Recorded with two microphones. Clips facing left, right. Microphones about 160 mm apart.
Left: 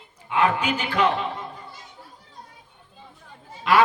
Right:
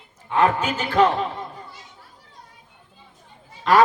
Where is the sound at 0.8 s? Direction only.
40° right (ahead or behind).